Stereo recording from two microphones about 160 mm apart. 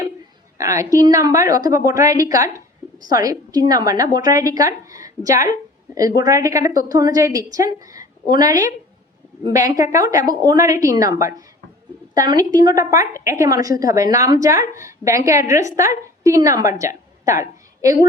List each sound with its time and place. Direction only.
0.6 s a woman's voice: 20° right (ahead or behind)